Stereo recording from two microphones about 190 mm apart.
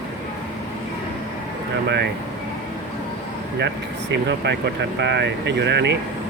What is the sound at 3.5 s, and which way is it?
Speech, 65° right (ahead or behind).